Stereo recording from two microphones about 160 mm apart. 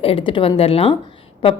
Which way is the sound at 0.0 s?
35° left (ahead or behind).